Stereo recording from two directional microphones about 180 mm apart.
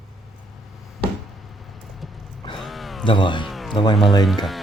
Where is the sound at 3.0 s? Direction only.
25° left (ahead or behind).